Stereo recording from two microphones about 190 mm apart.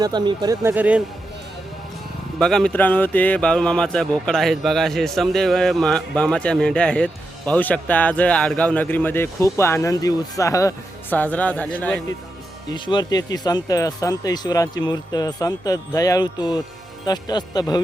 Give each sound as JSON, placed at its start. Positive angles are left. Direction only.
{"t": 0.0, "sound": "speech", "side_deg": -20}
{"t": 2.4, "sound": "speech", "side_deg": 0}
{"t": 12.7, "sound": "speech", "side_deg": 25}